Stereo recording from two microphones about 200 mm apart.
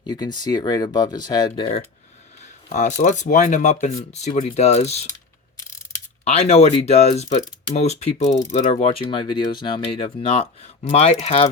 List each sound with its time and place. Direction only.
0.0 s speech: 20° left (ahead or behind)
2.6 s speech: 35° left (ahead or behind)
6.2 s speech: 30° left (ahead or behind)